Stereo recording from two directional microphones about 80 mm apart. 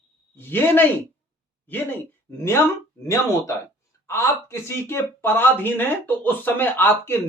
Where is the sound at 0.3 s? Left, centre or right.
Left.